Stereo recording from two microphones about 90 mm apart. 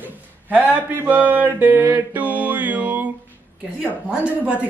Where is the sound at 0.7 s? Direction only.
20° right (ahead or behind).